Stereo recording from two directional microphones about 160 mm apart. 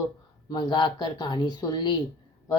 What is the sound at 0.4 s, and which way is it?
A woman's voice, 25° left (ahead or behind).